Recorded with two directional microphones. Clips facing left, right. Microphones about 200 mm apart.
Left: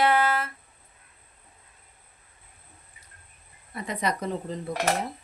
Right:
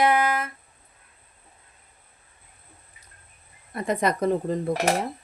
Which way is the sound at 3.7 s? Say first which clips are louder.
Right 5 dB; 50° right (ahead or behind).